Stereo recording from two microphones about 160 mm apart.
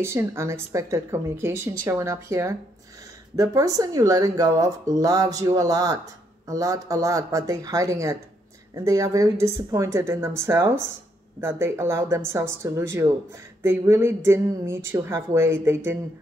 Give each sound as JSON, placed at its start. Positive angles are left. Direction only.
{"t": 0.0, "sound": "speech", "side_deg": -15}